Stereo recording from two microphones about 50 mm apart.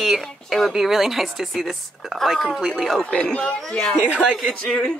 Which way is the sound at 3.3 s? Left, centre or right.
Centre.